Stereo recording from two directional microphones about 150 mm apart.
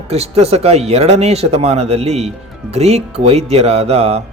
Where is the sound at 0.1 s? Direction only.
45° right (ahead or behind).